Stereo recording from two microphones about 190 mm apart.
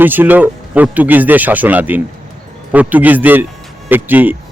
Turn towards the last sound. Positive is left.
turn(degrees=-10)  # may be behind; listen again after turning